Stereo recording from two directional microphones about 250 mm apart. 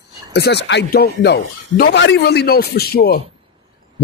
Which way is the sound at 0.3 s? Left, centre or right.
Left.